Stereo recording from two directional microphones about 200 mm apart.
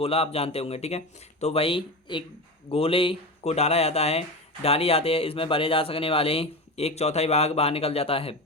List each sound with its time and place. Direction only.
0.0 s speech: 30° left (ahead or behind)